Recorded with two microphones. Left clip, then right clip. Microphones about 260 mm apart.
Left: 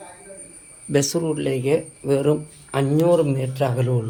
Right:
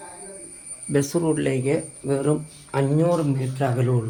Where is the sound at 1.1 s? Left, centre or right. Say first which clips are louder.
Even; centre.